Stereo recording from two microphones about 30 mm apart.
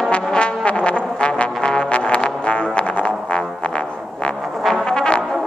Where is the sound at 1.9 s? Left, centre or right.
Left.